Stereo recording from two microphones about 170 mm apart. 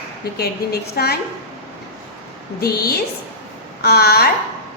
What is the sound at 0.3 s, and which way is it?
Speech, 65° left (ahead or behind).